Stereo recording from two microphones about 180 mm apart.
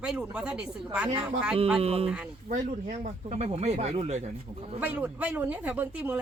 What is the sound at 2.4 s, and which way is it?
Speech, 45° right (ahead or behind).